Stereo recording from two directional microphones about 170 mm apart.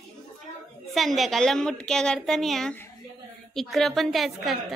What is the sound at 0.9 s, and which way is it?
A woman's voice, centre (ahead or behind).